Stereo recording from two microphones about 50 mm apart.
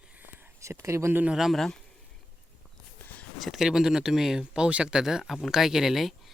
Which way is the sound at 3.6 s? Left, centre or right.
Centre.